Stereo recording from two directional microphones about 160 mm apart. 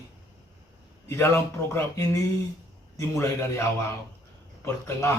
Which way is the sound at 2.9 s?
20° left (ahead or behind).